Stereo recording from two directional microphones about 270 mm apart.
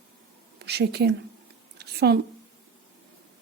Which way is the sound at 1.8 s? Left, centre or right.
Right.